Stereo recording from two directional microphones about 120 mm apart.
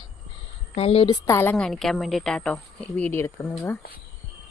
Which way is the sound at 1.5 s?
5° left (ahead or behind).